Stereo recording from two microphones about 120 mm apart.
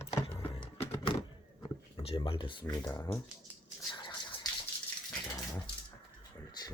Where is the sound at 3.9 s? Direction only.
40° left (ahead or behind).